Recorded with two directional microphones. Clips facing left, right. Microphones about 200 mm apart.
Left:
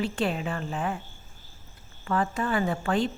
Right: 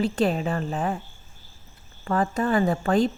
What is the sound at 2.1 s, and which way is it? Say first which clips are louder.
A woman's voice: right 4 dB; 40° right (ahead or behind).